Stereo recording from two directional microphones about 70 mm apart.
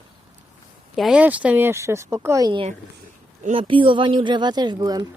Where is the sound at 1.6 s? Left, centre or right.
Right.